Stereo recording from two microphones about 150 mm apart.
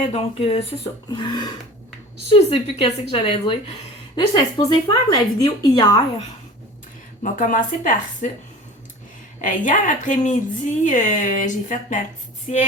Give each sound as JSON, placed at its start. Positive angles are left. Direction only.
{"t": 0.0, "sound": "a woman's voice", "side_deg": 40}
{"t": 7.2, "sound": "a woman's voice", "side_deg": 60}
{"t": 9.4, "sound": "a woman's voice", "side_deg": 60}